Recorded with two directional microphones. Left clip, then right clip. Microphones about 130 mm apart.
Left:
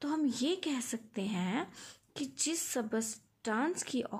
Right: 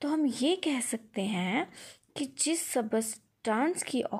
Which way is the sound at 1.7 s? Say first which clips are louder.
Right 4 dB; 20° right (ahead or behind).